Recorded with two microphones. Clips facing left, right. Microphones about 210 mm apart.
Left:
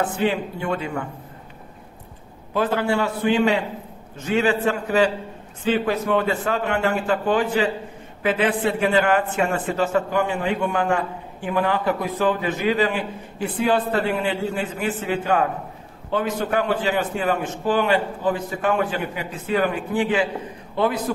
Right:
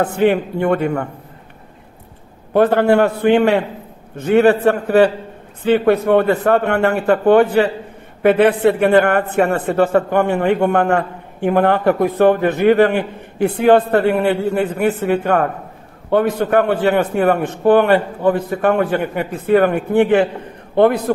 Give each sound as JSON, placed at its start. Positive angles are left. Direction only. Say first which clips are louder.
{"t": 0.0, "sound": "a man's voice", "louder": "right 7 dB", "side_deg": -60}
{"t": 2.5, "sound": "a man's voice", "louder": "right 9 dB", "side_deg": -60}